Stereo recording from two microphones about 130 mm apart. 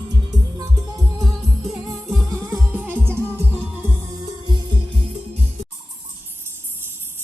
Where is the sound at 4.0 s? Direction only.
30° right (ahead or behind).